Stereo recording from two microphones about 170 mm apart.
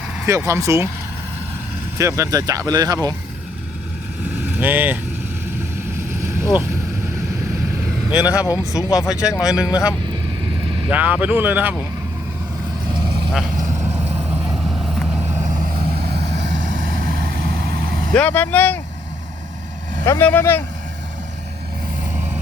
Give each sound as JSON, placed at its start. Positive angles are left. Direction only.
{"t": 0.3, "sound": "speech", "side_deg": -15}
{"t": 2.0, "sound": "speech", "side_deg": -20}
{"t": 4.3, "sound": "vehicle", "side_deg": -10}
{"t": 8.1, "sound": "speech", "side_deg": 20}
{"t": 10.6, "sound": "vehicle", "side_deg": -30}
{"t": 10.8, "sound": "speech", "side_deg": -10}
{"t": 13.6, "sound": "vehicle", "side_deg": -15}
{"t": 15.2, "sound": "vehicle", "side_deg": -15}
{"t": 17.2, "sound": "vehicle", "side_deg": -75}
{"t": 18.1, "sound": "speech", "side_deg": 10}
{"t": 20.1, "sound": "speech", "side_deg": 10}